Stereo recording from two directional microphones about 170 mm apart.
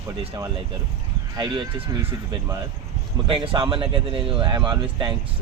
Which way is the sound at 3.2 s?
30° right (ahead or behind).